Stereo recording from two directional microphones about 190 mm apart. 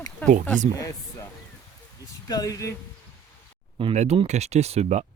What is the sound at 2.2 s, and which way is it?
Speech, 20° left (ahead or behind).